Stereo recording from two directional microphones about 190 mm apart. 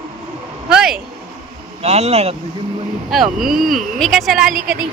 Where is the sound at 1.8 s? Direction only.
35° right (ahead or behind).